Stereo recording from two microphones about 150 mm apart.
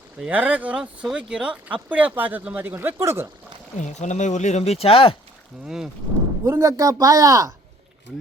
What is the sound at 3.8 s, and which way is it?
Speech, 55° left (ahead or behind).